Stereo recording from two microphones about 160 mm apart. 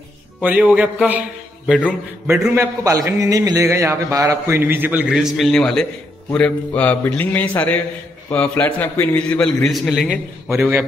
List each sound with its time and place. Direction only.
0.4 s speech: 10° right (ahead or behind)
2.2 s a man's voice: 5° right (ahead or behind)
2.5 s a man's voice: 20° right (ahead or behind); by 10.1 s centre (ahead or behind)
10.5 s speech: 15° right (ahead or behind)